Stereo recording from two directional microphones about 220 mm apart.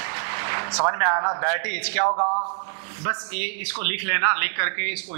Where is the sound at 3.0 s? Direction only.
10° right (ahead or behind).